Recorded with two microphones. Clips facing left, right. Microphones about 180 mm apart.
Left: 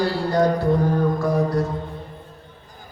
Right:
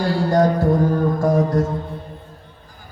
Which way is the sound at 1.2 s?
45° right (ahead or behind).